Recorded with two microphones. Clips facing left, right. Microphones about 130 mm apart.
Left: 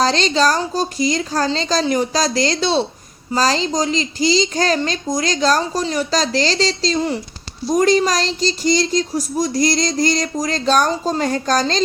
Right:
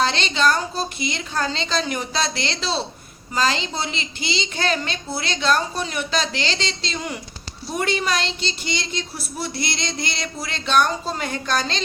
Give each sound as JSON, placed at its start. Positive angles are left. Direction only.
{"t": 0.0, "sound": "a woman's voice", "side_deg": 40}